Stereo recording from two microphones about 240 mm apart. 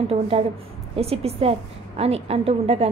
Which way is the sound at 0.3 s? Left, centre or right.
Right.